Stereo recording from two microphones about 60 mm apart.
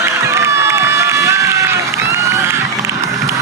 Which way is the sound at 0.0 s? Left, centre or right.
Right.